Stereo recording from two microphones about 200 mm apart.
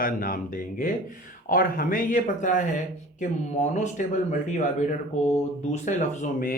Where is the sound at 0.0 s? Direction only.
45° left (ahead or behind).